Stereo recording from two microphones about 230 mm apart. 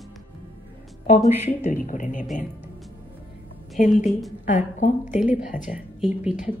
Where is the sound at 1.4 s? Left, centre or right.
Left.